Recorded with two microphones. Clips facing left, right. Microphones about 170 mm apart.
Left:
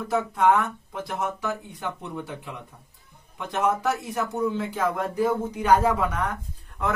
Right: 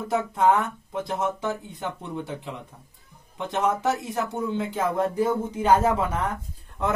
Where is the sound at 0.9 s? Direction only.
25° right (ahead or behind).